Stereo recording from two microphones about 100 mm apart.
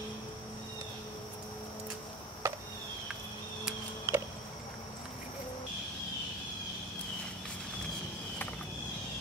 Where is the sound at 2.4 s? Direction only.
25° right (ahead or behind).